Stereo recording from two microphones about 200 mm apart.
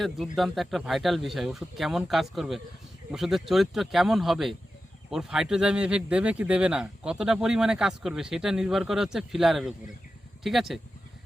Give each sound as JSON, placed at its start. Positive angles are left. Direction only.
{"t": 0.0, "sound": "speech", "side_deg": 0}